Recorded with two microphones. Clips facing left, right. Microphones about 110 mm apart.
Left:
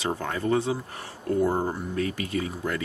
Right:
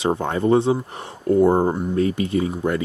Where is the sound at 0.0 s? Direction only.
25° right (ahead or behind).